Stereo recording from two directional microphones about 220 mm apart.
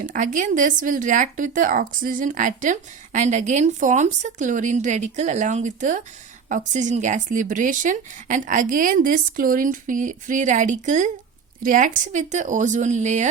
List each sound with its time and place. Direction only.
0.0 s speech: 35° right (ahead or behind)